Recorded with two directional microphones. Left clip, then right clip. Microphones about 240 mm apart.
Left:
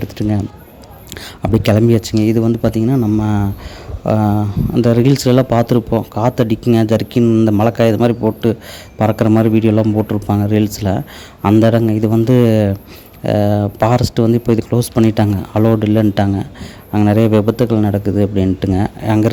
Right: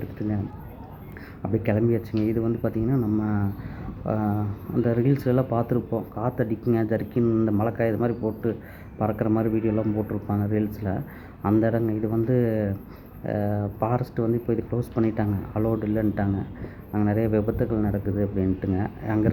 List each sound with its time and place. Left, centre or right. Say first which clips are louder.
0.2 s speech: left 11 dB; left
1.4 s speech: left 11 dB; left
2.7 s speech: left 10 dB; left
3.0 s speech: left 10 dB; left
10.2 s speech: left 11 dB; left